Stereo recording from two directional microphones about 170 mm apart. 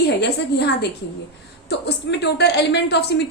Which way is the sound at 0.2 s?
80° left.